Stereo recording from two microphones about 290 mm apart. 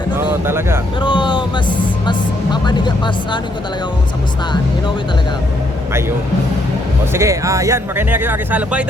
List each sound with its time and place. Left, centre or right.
0.4 s speech: centre
1.0 s speech: centre
7.1 s speech: centre